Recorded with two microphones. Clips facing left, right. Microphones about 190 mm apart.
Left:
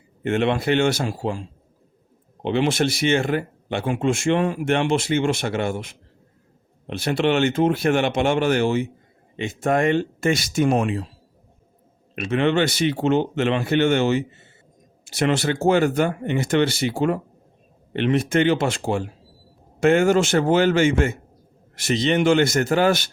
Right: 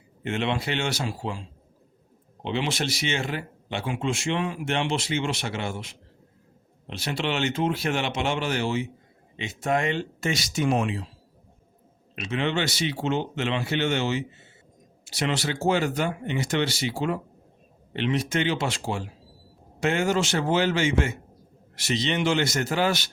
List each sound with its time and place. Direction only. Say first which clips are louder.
0.2 s speech: left 6 dB; 55° left (ahead or behind)
12.1 s speech: left 7 dB; 55° left (ahead or behind)